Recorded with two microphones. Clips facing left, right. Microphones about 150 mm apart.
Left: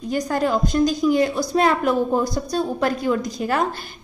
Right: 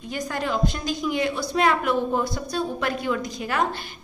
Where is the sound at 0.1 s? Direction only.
40° left (ahead or behind).